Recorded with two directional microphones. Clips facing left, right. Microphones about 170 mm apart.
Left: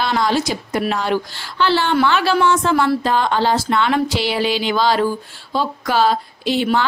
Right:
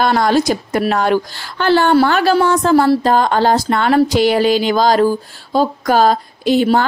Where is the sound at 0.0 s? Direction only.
50° right (ahead or behind).